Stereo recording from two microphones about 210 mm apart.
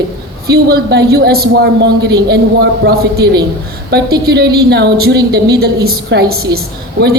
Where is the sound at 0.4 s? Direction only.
50° right (ahead or behind).